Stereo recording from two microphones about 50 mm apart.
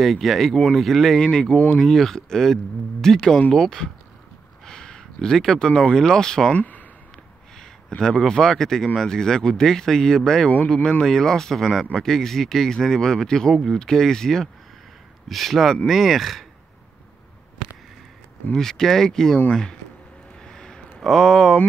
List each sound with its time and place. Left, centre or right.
0.0 s speech: centre
1.2 s speech: centre
6.5 s speech: left
8.0 s speech: centre
18.5 s speech: centre
20.4 s a sound: centre